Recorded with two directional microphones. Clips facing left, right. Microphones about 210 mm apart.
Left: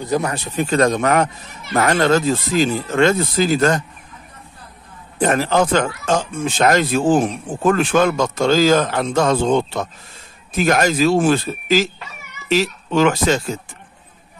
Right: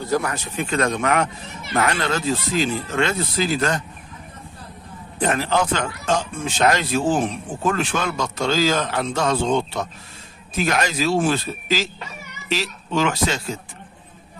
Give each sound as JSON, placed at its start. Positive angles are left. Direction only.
{"t": 0.0, "sound": "a man's voice", "side_deg": 15}
{"t": 0.3, "sound": "a man's voice", "side_deg": 40}
{"t": 5.2, "sound": "a man's voice", "side_deg": 45}